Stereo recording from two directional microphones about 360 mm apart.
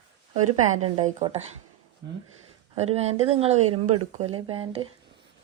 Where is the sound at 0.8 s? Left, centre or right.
Centre.